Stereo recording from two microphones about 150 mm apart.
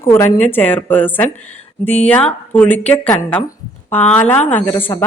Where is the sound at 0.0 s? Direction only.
15° left (ahead or behind).